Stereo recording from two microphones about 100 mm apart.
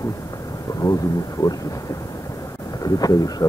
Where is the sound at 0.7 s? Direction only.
40° left (ahead or behind).